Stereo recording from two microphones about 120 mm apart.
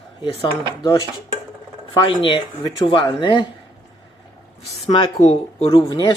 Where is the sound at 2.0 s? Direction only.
45° left (ahead or behind).